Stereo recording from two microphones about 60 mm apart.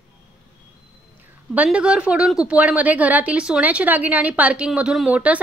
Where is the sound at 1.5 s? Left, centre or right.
Right.